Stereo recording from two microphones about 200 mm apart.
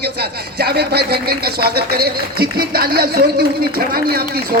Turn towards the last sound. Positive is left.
turn(degrees=-50)  # may be behind; listen again after turning